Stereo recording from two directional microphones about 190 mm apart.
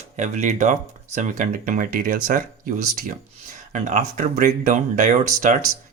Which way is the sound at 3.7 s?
40° right (ahead or behind).